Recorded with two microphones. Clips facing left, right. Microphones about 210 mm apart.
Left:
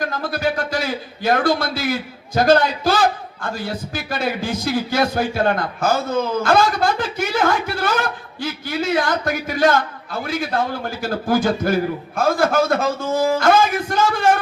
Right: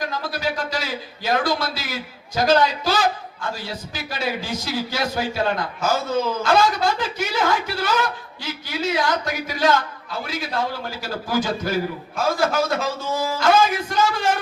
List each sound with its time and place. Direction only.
0.0 s a woman's voice: 55° left (ahead or behind)